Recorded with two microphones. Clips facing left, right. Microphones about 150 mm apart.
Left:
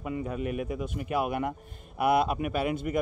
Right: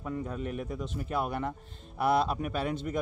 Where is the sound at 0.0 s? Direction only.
10° left (ahead or behind).